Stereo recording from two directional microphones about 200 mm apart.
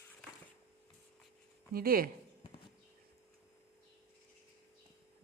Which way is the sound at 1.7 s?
45° right (ahead or behind).